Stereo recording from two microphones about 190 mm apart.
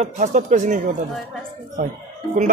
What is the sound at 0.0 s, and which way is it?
Speech, 40° right (ahead or behind).